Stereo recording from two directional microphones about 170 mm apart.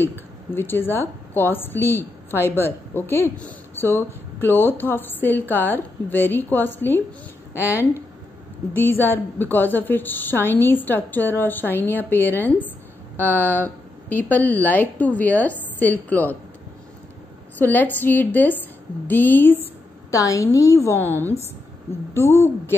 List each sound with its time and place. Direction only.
0.5 s a woman's voice: 15° left (ahead or behind)
7.5 s speech: 10° right (ahead or behind)
8.7 s a woman's voice: 10° left (ahead or behind)
17.6 s a woman's voice: 10° left (ahead or behind)